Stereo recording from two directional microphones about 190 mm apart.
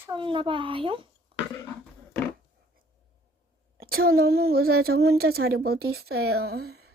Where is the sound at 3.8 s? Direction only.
50° right (ahead or behind).